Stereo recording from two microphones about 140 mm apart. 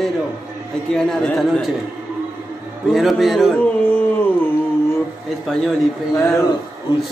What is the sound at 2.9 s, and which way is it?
Speech, centre (ahead or behind).